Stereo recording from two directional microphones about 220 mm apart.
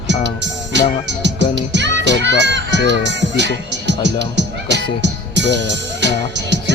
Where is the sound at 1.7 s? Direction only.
50° right (ahead or behind).